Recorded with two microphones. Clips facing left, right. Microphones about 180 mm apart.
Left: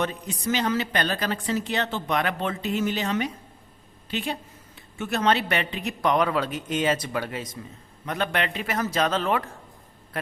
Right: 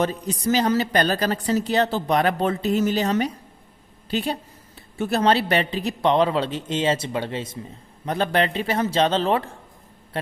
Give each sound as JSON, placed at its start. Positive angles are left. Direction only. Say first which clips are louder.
{"t": 0.0, "sound": "a woman's voice", "louder": "right 5 dB", "side_deg": -35}